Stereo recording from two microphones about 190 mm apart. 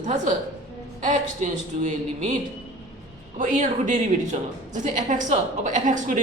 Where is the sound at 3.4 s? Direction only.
40° right (ahead or behind).